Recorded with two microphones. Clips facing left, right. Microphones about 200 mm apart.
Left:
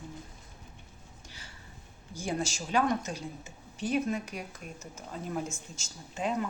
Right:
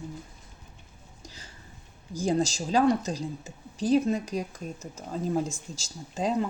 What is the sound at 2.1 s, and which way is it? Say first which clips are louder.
Speech: right 7 dB; 35° right (ahead or behind).